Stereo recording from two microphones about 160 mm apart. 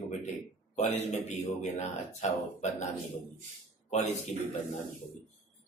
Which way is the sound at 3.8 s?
45° left (ahead or behind).